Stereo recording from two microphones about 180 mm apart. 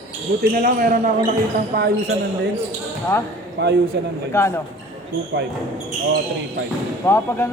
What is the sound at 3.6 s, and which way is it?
Speech, 70° right (ahead or behind).